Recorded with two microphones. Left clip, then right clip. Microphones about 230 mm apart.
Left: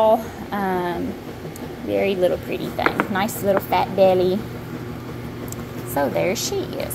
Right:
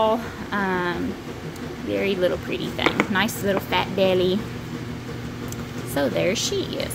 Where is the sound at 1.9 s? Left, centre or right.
Centre.